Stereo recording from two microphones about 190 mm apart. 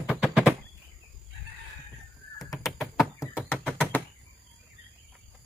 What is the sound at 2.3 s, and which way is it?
Crow, 20° left (ahead or behind).